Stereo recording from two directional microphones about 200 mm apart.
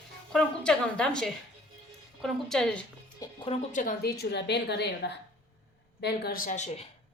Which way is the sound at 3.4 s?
40° left (ahead or behind).